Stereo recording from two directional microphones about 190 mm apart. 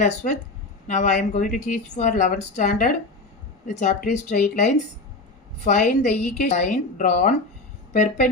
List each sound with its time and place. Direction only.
0.0 s a woman's voice: 40° left (ahead or behind)